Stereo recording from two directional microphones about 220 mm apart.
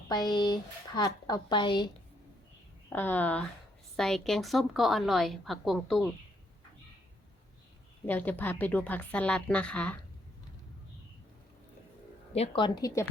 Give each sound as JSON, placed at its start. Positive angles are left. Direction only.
{"t": 0.1, "sound": "speech", "side_deg": 20}
{"t": 2.9, "sound": "a woman's voice", "side_deg": 10}
{"t": 8.0, "sound": "a woman's voice", "side_deg": 10}
{"t": 12.3, "sound": "speech", "side_deg": 25}